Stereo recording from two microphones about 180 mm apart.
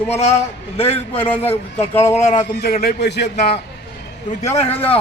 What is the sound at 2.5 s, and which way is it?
Speech, 55° left (ahead or behind).